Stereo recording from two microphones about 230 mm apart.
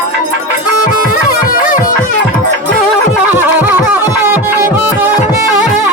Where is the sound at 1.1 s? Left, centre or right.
Left.